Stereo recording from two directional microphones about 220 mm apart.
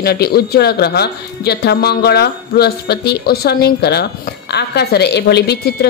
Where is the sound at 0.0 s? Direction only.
45° left (ahead or behind).